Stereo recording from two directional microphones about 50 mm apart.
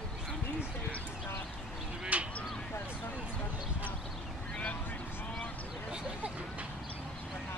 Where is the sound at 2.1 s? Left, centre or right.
Right.